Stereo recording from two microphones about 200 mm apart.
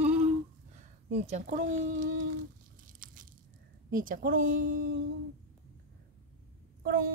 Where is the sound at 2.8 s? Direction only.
40° right (ahead or behind).